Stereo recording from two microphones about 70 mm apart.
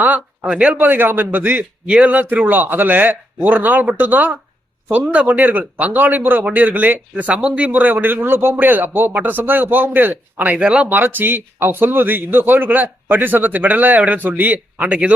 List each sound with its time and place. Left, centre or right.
0.0 s a man's voice: right
10.8 s a man's voice: right